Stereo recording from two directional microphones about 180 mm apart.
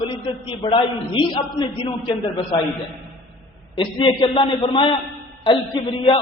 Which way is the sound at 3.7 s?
30° left (ahead or behind).